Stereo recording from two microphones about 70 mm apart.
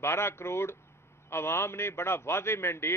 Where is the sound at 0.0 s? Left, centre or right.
Left.